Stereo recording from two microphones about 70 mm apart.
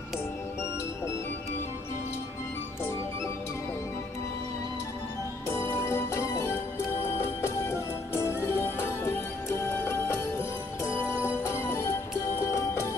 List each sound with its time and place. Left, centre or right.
5.5 s music: left